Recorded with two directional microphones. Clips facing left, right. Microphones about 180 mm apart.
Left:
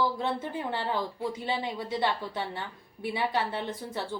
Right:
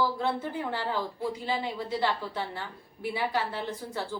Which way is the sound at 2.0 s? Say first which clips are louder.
Left 1 dB; 20° left (ahead or behind).